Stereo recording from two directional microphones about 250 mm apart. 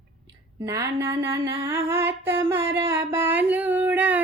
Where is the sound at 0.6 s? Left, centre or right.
Centre.